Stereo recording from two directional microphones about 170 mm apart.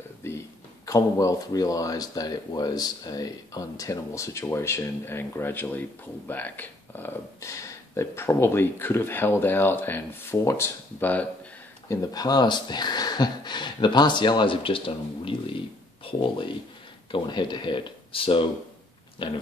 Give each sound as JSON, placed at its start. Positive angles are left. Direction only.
{"t": 0.2, "sound": "a sound", "side_deg": 15}
{"t": 0.8, "sound": "speech", "side_deg": 20}
{"t": 11.9, "sound": "speech", "side_deg": 20}
{"t": 16.0, "sound": "speech", "side_deg": 30}